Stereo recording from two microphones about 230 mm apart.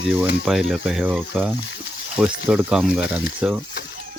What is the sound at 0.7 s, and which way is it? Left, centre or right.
Speech, centre.